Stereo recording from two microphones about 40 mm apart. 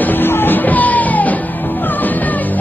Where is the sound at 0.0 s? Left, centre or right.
Left.